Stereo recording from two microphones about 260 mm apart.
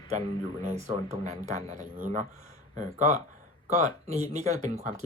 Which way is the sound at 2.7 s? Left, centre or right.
Right.